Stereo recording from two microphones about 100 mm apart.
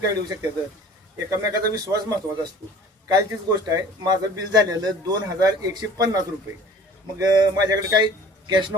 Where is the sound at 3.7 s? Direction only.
40° right (ahead or behind).